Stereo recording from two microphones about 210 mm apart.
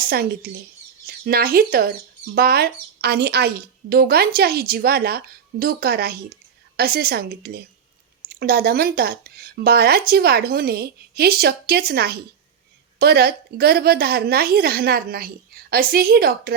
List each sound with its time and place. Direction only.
0.0 s a woman's voice: 45° right (ahead or behind)